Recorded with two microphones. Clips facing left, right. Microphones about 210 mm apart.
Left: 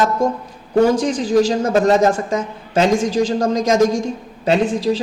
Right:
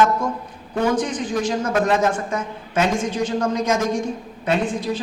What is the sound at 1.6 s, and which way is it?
A man's voice, 35° left (ahead or behind).